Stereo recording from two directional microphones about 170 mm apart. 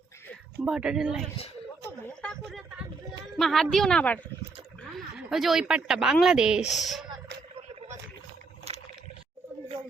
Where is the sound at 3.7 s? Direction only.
5° left (ahead or behind).